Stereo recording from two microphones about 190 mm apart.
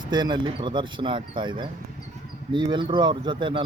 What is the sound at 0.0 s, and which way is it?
Speech, 20° right (ahead or behind).